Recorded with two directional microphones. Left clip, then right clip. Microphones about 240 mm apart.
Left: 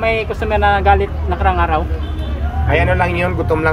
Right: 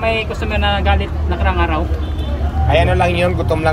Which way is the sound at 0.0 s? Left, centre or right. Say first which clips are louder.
Left 1 dB; centre.